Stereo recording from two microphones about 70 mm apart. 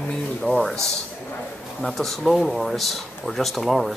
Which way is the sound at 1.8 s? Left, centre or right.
Centre.